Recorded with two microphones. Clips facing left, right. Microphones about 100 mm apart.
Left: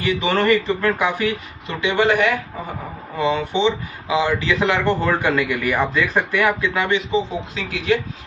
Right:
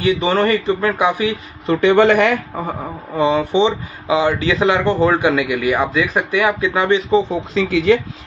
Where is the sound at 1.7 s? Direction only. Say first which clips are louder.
Right 7 dB; 50° right (ahead or behind); by 2.3 s 70° right (ahead or behind).